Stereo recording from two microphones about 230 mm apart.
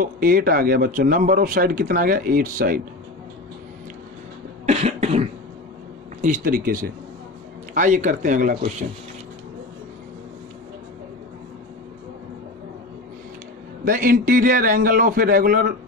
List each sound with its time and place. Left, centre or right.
0.0 s a man's voice: right
4.6 s cough: right
6.2 s a man's voice: right
13.8 s a man's voice: right